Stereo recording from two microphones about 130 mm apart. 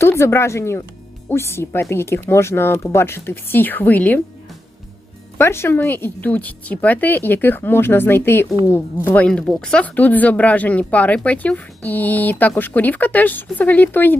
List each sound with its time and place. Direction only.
0.0 s speech: 20° left (ahead or behind)
5.4 s speech: 20° left (ahead or behind)